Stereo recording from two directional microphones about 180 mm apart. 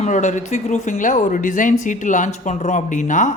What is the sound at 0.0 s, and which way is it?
Speech, 40° left (ahead or behind).